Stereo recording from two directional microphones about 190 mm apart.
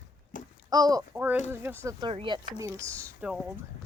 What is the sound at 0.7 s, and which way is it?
Speech, 20° right (ahead or behind).